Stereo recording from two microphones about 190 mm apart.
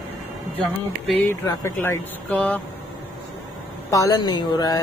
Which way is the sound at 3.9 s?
20° left (ahead or behind).